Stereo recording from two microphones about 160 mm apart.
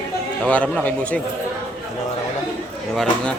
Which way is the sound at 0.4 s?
10° left (ahead or behind).